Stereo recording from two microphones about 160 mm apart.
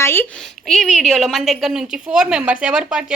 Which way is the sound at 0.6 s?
Centre (ahead or behind).